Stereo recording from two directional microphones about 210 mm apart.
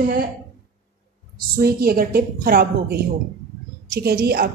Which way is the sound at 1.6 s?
45° right (ahead or behind).